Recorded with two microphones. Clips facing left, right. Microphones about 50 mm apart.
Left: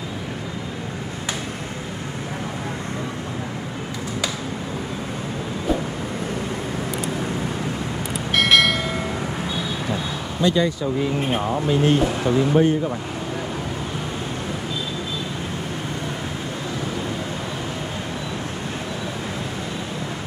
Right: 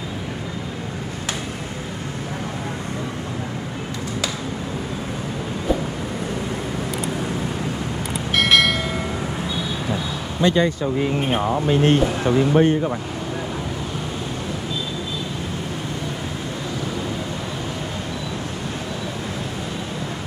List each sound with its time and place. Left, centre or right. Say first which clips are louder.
8.3 s train: even; centre
10.4 s speech: right 1 dB; right